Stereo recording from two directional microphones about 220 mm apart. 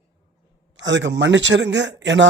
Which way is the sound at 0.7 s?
55° right (ahead or behind).